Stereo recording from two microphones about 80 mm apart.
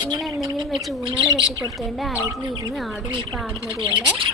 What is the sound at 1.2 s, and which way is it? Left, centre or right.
Speech, left.